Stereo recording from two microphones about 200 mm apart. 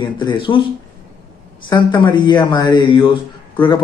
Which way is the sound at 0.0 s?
20° left (ahead or behind).